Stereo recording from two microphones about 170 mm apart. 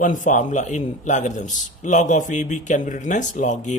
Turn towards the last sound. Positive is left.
turn(degrees=45)  # may be behind; listen again after turning